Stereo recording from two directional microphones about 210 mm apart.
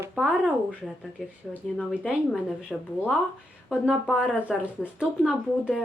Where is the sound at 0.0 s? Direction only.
5° right (ahead or behind).